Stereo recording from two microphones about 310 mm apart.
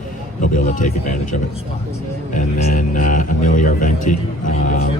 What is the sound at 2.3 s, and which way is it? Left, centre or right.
A man's voice, left.